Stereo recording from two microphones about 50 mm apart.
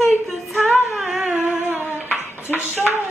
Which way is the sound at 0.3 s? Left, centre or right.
Centre.